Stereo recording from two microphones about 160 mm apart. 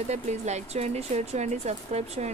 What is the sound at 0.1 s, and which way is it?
A woman's voice, 45° right (ahead or behind).